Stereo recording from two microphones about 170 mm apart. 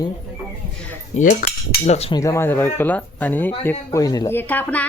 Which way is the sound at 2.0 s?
35° left (ahead or behind).